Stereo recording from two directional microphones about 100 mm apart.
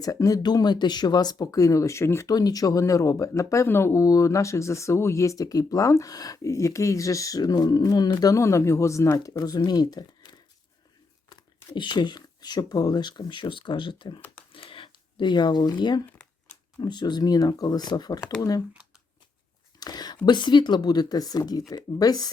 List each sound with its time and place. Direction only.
0.0 s speech: 40° left (ahead or behind)
2.3 s speech: 40° left (ahead or behind)
11.7 s speech: 50° left (ahead or behind)
14.5 s a sound: 60° left (ahead or behind); by 16.0 s 45° left (ahead or behind)
16.0 s crumpling: 15° left (ahead or behind)
16.8 s speech: 45° left (ahead or behind)
19.8 s whispering: 40° left (ahead or behind)
20.2 s speech: 50° left (ahead or behind)